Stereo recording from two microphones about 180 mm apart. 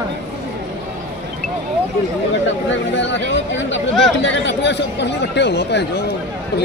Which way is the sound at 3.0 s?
80° left.